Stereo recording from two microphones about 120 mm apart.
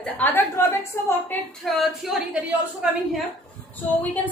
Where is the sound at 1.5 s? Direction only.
Centre (ahead or behind).